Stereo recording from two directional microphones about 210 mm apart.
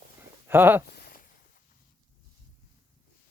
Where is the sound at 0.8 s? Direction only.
50° left (ahead or behind).